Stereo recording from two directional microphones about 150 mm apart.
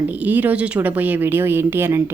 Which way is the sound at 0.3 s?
10° right (ahead or behind).